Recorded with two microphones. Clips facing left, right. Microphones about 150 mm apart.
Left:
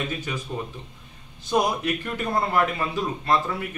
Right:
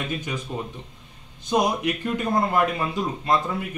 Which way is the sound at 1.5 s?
20° right (ahead or behind).